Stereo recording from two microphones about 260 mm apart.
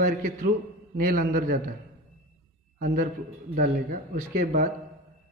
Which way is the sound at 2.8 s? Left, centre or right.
Right.